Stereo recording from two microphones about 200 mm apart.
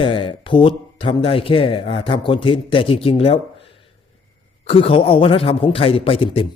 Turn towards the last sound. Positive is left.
turn(degrees=25)  # may be behind; listen again after turning